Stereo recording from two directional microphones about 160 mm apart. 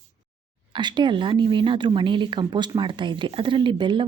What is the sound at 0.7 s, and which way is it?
Speech, 30° right (ahead or behind).